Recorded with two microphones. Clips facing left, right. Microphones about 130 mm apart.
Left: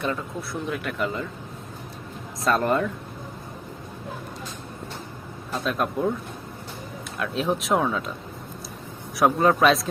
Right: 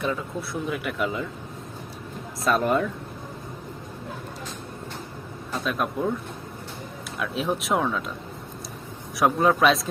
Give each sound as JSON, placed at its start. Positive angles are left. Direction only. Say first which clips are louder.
{"t": 0.0, "sound": "speech", "louder": "even", "side_deg": 0}
{"t": 2.4, "sound": "speech", "louder": "even", "side_deg": 0}
{"t": 5.6, "sound": "speech", "louder": "left 1 dB", "side_deg": 0}
{"t": 7.2, "sound": "speech", "louder": "left 1 dB", "side_deg": 0}
{"t": 9.1, "sound": "speech", "louder": "left 1 dB", "side_deg": 0}